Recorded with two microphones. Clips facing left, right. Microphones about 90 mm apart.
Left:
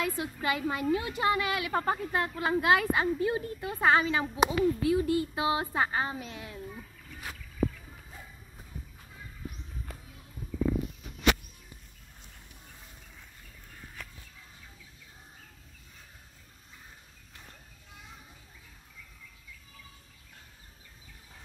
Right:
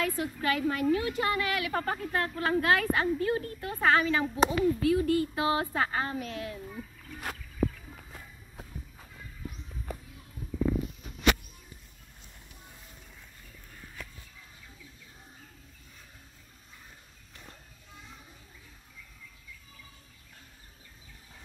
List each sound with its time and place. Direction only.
0.0 s a woman's voice: 15° left (ahead or behind)